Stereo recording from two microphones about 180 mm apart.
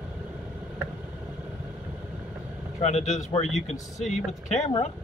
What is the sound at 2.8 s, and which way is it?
Speech, 40° left (ahead or behind).